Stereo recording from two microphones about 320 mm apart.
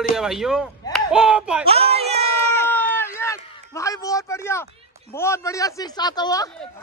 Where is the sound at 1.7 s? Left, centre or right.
Centre.